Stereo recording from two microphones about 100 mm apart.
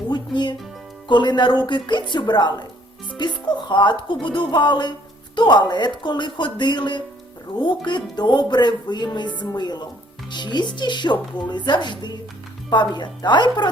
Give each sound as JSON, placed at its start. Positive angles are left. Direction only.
{"t": 0.1, "sound": "music", "side_deg": 50}
{"t": 1.0, "sound": "a woman's voice", "side_deg": 50}